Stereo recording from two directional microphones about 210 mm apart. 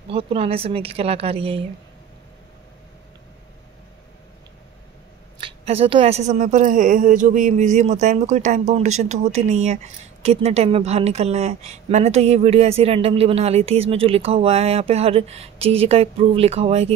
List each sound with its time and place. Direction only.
0.1 s speech: 25° right (ahead or behind)
5.4 s a woman's voice: 25° right (ahead or behind)